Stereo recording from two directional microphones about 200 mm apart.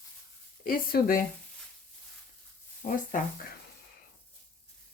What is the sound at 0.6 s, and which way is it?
Speech, 45° left (ahead or behind).